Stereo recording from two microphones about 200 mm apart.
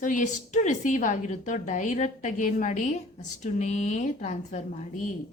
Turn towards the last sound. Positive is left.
turn(degrees=35)  # may be behind; listen again after turning